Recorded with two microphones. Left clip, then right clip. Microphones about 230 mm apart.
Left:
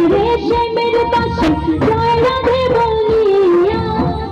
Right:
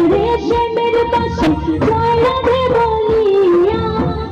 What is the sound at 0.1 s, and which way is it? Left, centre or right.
Music, left.